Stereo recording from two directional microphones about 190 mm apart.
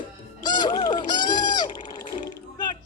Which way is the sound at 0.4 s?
20° left (ahead or behind).